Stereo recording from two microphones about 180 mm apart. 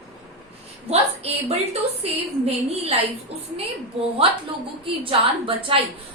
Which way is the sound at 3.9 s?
35° right (ahead or behind).